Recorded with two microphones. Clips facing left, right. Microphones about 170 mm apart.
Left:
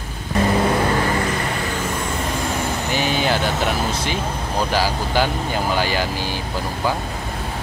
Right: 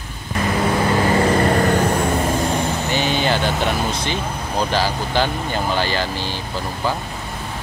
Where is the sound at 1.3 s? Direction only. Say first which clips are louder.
Right 8 dB; 45° right (ahead or behind).